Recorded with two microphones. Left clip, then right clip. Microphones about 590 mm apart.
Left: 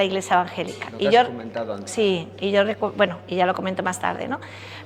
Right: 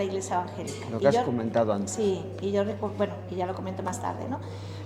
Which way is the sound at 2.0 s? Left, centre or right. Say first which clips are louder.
Left 6 dB; left.